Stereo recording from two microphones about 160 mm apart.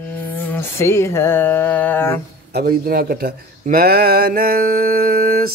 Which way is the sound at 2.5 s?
80° right.